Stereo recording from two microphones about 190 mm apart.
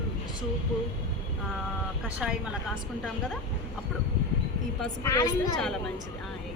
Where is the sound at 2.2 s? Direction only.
5° right (ahead or behind).